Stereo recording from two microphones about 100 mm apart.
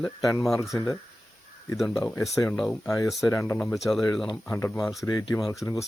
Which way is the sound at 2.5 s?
5° left (ahead or behind).